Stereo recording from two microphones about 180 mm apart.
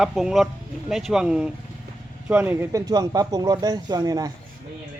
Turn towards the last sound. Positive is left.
turn(degrees=-20)  # may be behind; listen again after turning